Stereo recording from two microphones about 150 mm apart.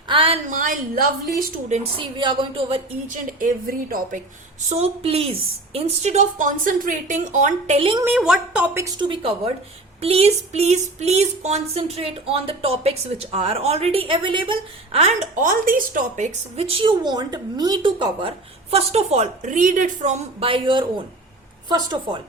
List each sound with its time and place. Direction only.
0.1 s a sound: 35° right (ahead or behind)
0.5 s a woman's voice: 70° right (ahead or behind)
1.7 s speech: 40° right (ahead or behind)
3.1 s a woman's voice: 70° right (ahead or behind)
4.7 s speech: 45° right (ahead or behind)
7.8 s speech: 35° right (ahead or behind)
8.0 s a woman's voice: 5° right (ahead or behind)
9.0 s speech: 35° right (ahead or behind); by 20.2 s 55° right (ahead or behind)
20.4 s a woman's voice: 35° right (ahead or behind)